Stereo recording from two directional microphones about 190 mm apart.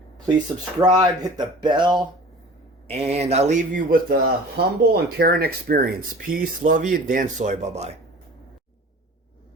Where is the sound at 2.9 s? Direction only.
35° right (ahead or behind).